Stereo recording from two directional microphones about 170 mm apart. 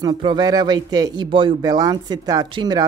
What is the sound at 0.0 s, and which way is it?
Speech, 25° right (ahead or behind).